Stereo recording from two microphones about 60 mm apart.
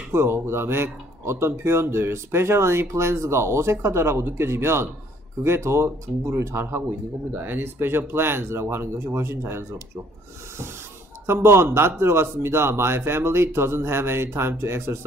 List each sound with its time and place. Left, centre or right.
0.1 s speech: right
11.2 s speech: right